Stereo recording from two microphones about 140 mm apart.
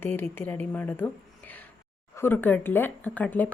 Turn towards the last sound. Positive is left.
turn(degrees=10)  # may be behind; listen again after turning